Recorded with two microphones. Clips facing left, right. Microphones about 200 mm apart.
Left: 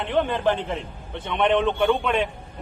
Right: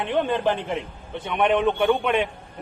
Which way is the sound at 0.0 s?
15° right (ahead or behind).